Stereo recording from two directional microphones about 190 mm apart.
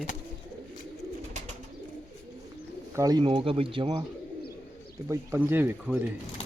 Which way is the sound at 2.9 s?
20° right (ahead or behind).